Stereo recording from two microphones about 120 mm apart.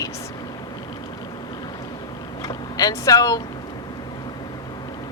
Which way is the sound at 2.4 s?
30° left (ahead or behind).